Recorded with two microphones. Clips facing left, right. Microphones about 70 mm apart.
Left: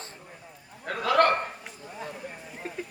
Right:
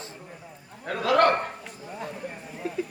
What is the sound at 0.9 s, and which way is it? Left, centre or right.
Speech, right.